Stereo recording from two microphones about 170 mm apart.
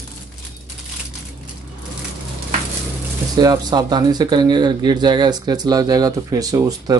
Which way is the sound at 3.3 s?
25° right (ahead or behind).